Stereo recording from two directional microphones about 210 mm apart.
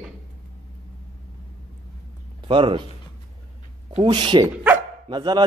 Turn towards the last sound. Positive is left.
turn(degrees=-20)  # may be behind; listen again after turning